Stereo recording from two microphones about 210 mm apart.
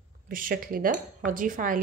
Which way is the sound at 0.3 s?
40° right (ahead or behind).